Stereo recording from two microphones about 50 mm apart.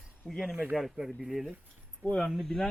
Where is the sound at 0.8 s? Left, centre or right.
Centre.